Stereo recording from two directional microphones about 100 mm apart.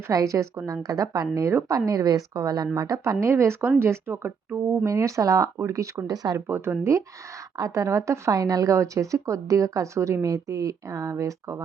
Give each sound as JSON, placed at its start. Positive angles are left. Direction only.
{"t": 0.1, "sound": "speech", "side_deg": -35}